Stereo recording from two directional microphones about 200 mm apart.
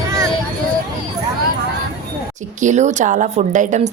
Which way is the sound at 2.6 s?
35° right (ahead or behind).